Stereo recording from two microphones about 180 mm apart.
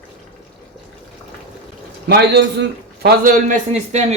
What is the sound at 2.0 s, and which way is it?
A man's voice, 65° right (ahead or behind).